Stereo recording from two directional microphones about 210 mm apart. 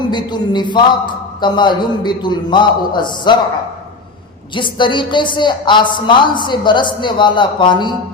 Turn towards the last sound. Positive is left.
turn(degrees=20)  # may be behind; listen again after turning